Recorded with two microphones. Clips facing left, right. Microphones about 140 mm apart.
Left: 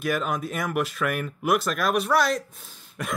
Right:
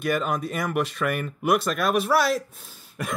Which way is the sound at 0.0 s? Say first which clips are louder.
Right 1 dB; centre (ahead or behind).